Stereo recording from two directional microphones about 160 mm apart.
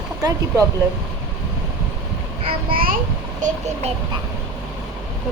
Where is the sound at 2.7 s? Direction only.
65° right (ahead or behind).